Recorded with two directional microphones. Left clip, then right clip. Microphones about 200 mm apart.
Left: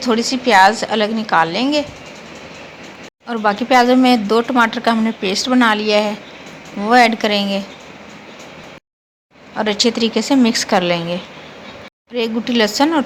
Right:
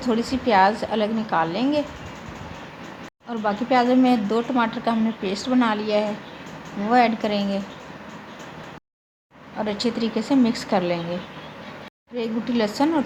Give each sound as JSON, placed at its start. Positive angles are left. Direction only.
{"t": 0.0, "sound": "a woman's voice", "side_deg": 15}
{"t": 3.2, "sound": "speech", "side_deg": 20}
{"t": 9.6, "sound": "speech", "side_deg": 20}
{"t": 12.1, "sound": "speech", "side_deg": 20}